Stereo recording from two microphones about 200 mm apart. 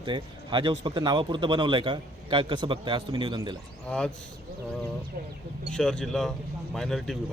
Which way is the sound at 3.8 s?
5° left (ahead or behind).